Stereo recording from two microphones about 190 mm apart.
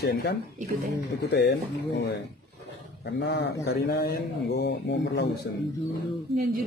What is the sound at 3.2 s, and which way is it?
Speech, 65° left (ahead or behind).